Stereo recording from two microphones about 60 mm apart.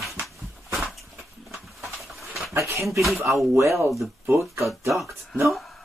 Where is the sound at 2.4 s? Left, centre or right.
Right.